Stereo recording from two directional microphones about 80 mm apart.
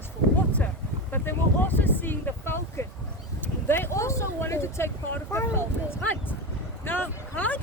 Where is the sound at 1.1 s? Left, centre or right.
Left.